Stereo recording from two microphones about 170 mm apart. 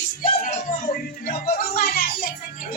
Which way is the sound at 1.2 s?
60° left (ahead or behind).